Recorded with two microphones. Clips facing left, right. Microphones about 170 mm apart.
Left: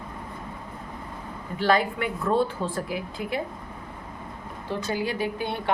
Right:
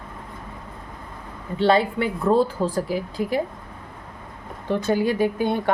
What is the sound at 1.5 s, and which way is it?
Speech, 30° right (ahead or behind).